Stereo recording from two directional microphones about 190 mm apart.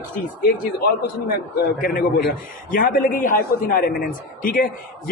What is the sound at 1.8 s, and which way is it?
A man's voice, 50° left (ahead or behind).